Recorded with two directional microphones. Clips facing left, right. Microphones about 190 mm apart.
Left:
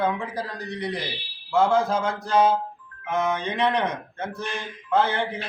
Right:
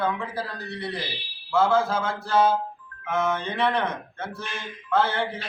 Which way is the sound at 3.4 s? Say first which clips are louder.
Left 1 dB; 15° left (ahead or behind).